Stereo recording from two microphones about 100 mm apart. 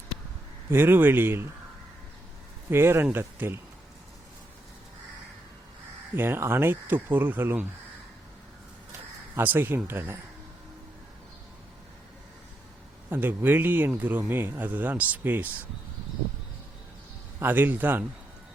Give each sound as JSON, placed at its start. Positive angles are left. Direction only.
{"t": 0.7, "sound": "speech", "side_deg": -20}
{"t": 2.6, "sound": "speech", "side_deg": -25}
{"t": 6.1, "sound": "speech", "side_deg": -25}
{"t": 9.3, "sound": "speech", "side_deg": -20}
{"t": 13.1, "sound": "speech", "side_deg": -20}
{"t": 17.4, "sound": "speech", "side_deg": -20}